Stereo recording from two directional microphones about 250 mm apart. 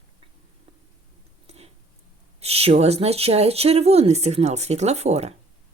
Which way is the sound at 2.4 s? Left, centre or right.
Right.